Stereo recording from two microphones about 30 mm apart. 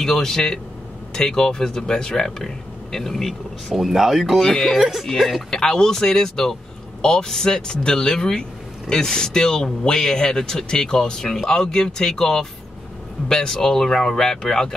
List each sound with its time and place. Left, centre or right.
0.0 s speech: centre
3.7 s speech: centre
5.5 s speech: centre